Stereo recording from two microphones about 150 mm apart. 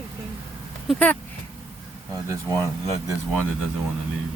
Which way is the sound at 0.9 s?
10° left (ahead or behind).